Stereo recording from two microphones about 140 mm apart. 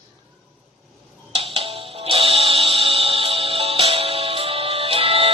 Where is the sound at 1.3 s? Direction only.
45° right (ahead or behind).